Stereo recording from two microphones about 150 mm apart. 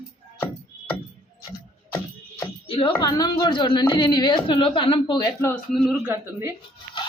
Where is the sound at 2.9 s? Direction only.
25° left (ahead or behind).